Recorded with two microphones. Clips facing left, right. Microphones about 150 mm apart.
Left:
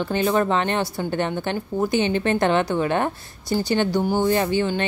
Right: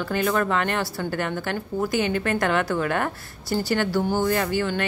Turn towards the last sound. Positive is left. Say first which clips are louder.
# left 3 dB
turn(degrees=20)  # may be behind; listen again after turning